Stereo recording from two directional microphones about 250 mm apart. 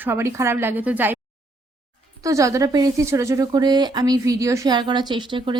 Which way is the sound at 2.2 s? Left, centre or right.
Centre.